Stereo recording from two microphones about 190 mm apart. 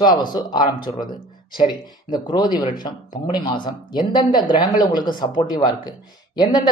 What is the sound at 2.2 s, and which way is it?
Speech, 25° left (ahead or behind).